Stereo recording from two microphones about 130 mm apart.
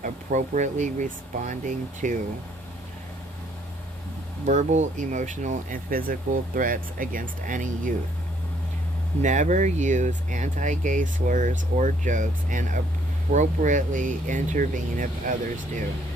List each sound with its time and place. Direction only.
0.0 s speech: 70° right (ahead or behind)
4.4 s speech: 65° right (ahead or behind); by 7.9 s 90° right
9.2 s speech: 70° right (ahead or behind); by 15.1 s 90° right